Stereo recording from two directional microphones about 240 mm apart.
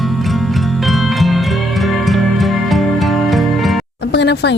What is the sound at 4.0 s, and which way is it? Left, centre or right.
Music, left.